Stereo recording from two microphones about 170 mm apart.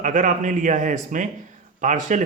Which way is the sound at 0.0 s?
50° right (ahead or behind).